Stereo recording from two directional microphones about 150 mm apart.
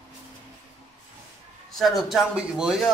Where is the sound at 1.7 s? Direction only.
Centre (ahead or behind).